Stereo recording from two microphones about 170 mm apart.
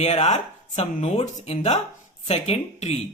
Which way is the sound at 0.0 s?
40° left (ahead or behind).